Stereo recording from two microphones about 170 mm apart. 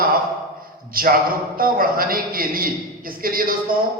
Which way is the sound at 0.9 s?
60° right (ahead or behind).